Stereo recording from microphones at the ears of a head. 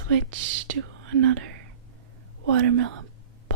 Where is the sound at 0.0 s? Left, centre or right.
Right.